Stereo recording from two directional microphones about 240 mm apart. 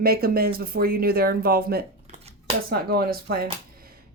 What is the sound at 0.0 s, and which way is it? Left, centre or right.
Speech, right.